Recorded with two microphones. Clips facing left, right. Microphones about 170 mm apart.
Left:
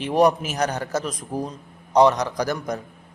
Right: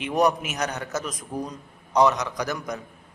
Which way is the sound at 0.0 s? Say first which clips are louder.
Left 4 dB; 30° left (ahead or behind).